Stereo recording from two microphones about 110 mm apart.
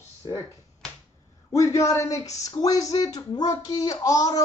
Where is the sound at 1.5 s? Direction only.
30° left (ahead or behind).